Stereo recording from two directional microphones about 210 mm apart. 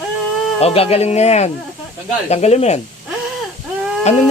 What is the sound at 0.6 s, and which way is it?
Speech, 30° left (ahead or behind).